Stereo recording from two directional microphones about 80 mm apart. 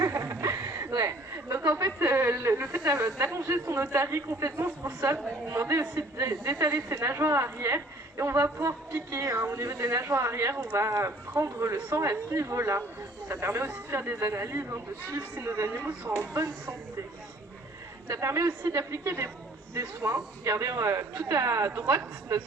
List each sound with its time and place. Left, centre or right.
0.0 s speech: right
16.1 s speech: right
18.1 s speech: right